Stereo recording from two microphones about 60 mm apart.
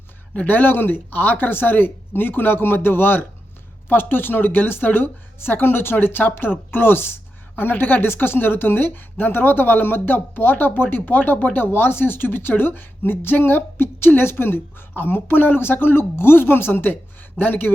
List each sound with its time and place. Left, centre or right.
0.3 s a woman's voice: left